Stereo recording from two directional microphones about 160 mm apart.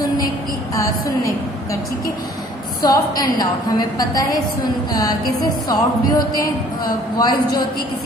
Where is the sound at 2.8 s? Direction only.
25° left (ahead or behind).